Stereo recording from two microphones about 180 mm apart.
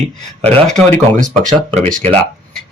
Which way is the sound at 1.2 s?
45° right (ahead or behind).